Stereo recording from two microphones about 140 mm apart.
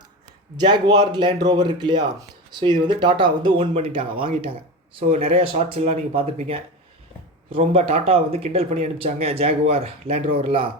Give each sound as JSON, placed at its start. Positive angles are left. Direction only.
{"t": 0.5, "sound": "speech", "side_deg": -35}